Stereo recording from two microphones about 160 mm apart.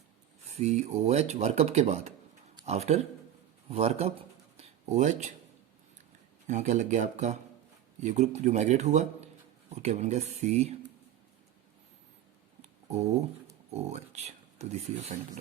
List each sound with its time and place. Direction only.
0.4 s speech: 45° right (ahead or behind)
4.5 s a sound: 45° right (ahead or behind)
6.5 s speech: 50° right (ahead or behind)
13.7 s speech: 45° right (ahead or behind)